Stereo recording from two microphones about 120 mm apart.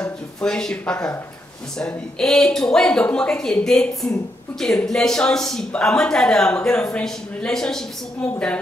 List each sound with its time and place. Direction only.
0.4 s speech: 5° left (ahead or behind)